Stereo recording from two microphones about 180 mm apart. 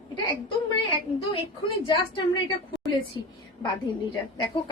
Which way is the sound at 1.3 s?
30° left (ahead or behind).